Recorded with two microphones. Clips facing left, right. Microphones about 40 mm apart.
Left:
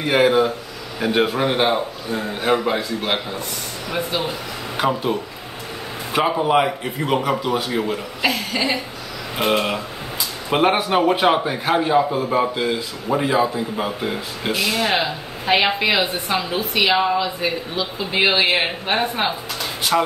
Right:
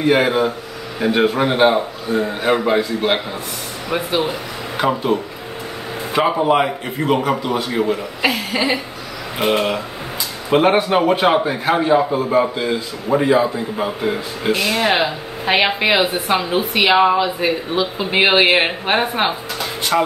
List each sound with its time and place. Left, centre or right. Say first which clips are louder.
0.0 s a man's voice: right 1 dB; centre
4.7 s speech: right 3 dB; centre
6.4 s a man's voice: right 2 dB; centre
7.9 s a man's voice: right 3 dB; centre
14.6 s a woman's voice: right 2 dB; centre
19.9 s a man's voice: right 2 dB; centre